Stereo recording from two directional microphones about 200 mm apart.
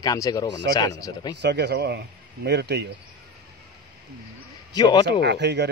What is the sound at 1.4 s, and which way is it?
Speech, 60° right (ahead or behind).